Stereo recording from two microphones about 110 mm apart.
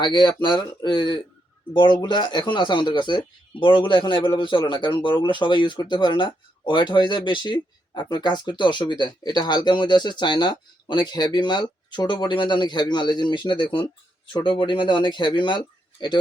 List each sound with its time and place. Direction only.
0.0 s speech: 40° left (ahead or behind)